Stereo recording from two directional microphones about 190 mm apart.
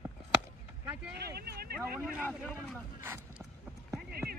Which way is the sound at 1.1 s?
55° right (ahead or behind).